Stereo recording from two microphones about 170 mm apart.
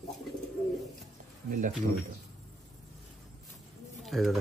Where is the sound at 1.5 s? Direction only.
50° right (ahead or behind).